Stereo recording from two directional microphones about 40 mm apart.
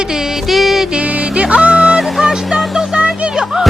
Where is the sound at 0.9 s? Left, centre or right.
Right.